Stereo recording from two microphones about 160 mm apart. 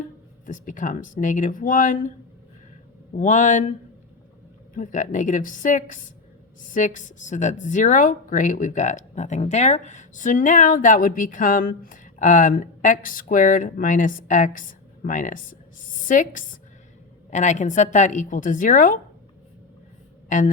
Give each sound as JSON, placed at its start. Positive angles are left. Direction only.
{"t": 0.4, "sound": "a woman's voice", "side_deg": 55}
{"t": 3.2, "sound": "a woman's voice", "side_deg": 55}
{"t": 4.7, "sound": "a woman's voice", "side_deg": 55}